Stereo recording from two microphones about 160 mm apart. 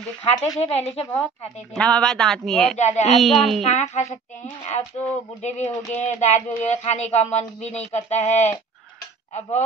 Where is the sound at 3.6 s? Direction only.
45° left (ahead or behind).